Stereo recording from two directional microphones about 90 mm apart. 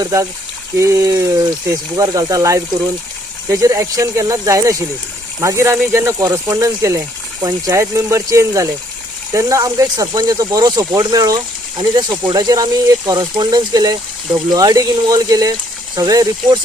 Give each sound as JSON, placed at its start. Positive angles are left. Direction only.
{"t": 0.0, "sound": "speech", "side_deg": -35}
{"t": 13.3, "sound": "speech", "side_deg": -60}